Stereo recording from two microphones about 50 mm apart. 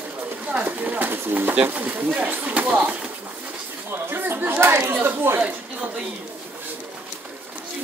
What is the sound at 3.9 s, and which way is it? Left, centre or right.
Speech, right.